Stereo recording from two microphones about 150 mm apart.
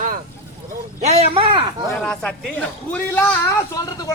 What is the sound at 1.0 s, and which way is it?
Speech, 35° right (ahead or behind).